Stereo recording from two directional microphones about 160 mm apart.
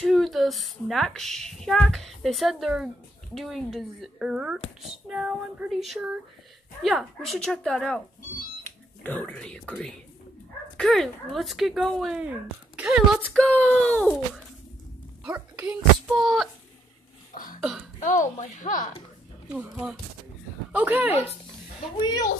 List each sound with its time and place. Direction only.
0.0 s speech: centre (ahead or behind)
13.2 s speech: 5° left (ahead or behind)
15.2 s a child's voice: 10° right (ahead or behind)
16.1 s speech: centre (ahead or behind)
17.3 s cough: 55° left (ahead or behind)
17.6 s speech: 5° right (ahead or behind)
18.0 s a woman's voice: 50° left (ahead or behind)
19.5 s speech: 5° right (ahead or behind)